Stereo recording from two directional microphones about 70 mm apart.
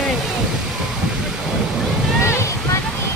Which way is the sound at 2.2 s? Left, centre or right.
Left.